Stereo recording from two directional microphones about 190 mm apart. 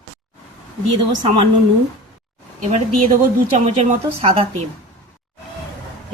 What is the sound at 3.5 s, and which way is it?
Speech, 35° right (ahead or behind).